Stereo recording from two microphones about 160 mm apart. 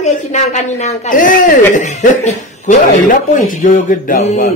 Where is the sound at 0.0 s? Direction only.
45° left (ahead or behind).